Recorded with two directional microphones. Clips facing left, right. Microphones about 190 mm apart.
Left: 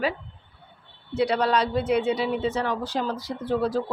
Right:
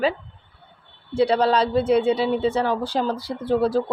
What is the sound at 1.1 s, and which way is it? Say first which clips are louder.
Speech: right 4 dB; 30° right (ahead or behind).